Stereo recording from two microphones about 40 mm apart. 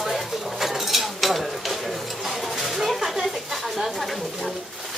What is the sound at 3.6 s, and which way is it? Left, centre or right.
Speech, centre.